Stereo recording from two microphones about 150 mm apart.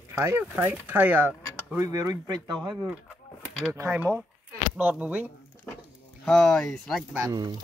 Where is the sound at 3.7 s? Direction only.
15° right (ahead or behind).